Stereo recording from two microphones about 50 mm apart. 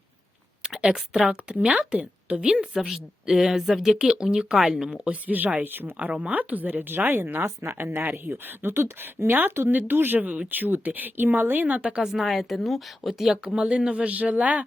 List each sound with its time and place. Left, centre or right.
0.6 s a sound: centre
1.7 s a woman's voice: right
4.9 s speech: right
5.3 s speech: right
6.1 s speech: right
7.4 s a woman's voice: right
7.8 s speech: right
12.0 s a woman's voice: centre; by 14.6 s right